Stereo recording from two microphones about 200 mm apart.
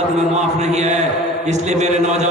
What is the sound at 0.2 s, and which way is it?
A man's voice, 35° right (ahead or behind).